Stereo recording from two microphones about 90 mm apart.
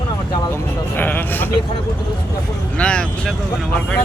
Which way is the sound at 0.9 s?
20° left (ahead or behind).